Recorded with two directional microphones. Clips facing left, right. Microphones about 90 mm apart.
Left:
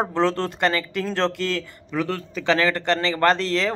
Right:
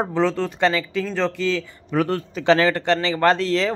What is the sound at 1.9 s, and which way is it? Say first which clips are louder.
Speech: right 4 dB; 35° right (ahead or behind).